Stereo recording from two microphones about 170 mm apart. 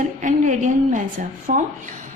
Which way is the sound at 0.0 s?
45° right (ahead or behind).